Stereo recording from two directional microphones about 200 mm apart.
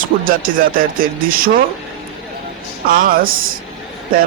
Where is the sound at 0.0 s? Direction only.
45° right (ahead or behind).